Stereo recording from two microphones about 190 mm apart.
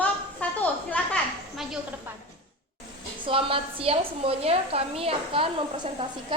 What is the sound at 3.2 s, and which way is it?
A woman's voice, 30° right (ahead or behind).